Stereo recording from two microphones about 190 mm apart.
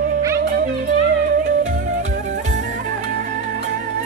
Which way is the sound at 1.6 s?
40° right (ahead or behind).